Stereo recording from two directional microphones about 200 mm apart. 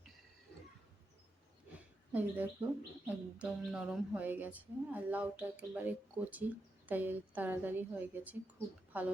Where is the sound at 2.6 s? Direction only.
10° right (ahead or behind).